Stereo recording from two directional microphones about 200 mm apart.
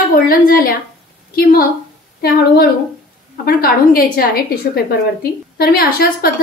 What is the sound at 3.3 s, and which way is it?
A woman's voice, 50° left (ahead or behind).